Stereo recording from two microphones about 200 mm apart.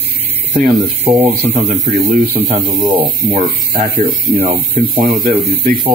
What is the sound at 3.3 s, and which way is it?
Speech, 40° right (ahead or behind).